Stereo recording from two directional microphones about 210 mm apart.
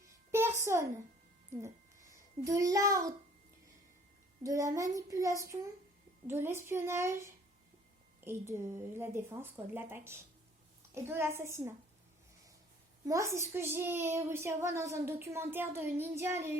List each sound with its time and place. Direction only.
0.3 s a sound: 10° right (ahead or behind)
1.6 s a child's voice: 15° right (ahead or behind)
4.4 s a child's voice: 15° right (ahead or behind)
13.1 s a child's voice: 15° right (ahead or behind)